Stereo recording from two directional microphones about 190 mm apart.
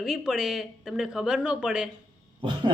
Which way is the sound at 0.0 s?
5° right (ahead or behind).